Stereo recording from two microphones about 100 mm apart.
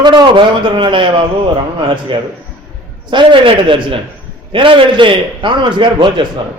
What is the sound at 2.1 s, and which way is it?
A man's voice, 60° right (ahead or behind).